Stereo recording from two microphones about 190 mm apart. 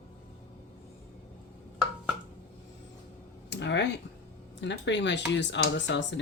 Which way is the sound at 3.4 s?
70° left (ahead or behind).